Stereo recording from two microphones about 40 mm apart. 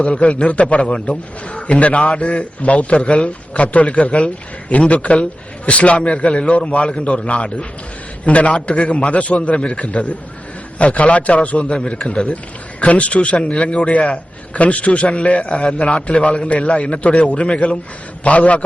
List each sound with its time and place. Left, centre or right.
0.0 s a man's voice: left